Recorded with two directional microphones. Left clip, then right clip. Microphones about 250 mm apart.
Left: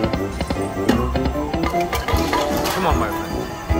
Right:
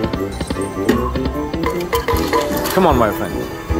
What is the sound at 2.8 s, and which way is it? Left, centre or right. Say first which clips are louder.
Speech: right 9 dB; right.